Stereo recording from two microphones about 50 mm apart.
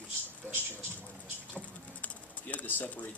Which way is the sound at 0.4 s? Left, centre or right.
Right.